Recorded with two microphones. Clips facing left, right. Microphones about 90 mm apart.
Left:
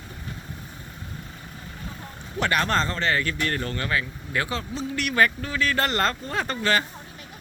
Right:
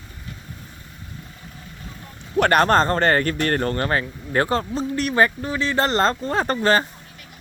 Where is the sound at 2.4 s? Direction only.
50° right (ahead or behind).